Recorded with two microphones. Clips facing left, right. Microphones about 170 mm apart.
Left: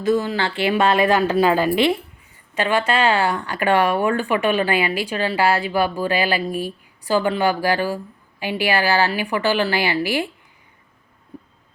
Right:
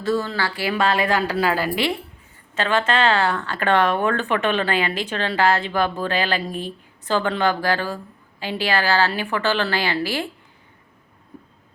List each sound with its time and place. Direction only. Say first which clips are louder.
0.0 s speech: left 3 dB; 15° left (ahead or behind)